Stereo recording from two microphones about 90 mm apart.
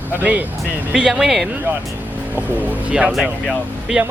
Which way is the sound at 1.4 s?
20° right (ahead or behind).